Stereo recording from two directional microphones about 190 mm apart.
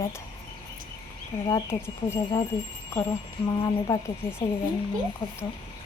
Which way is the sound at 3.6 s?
20° left (ahead or behind).